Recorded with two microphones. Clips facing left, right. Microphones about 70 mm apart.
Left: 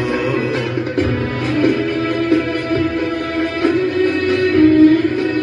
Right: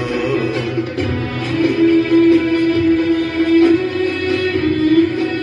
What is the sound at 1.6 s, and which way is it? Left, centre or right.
Music, left.